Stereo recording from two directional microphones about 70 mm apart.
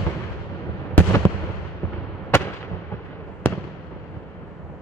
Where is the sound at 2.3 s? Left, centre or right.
Left.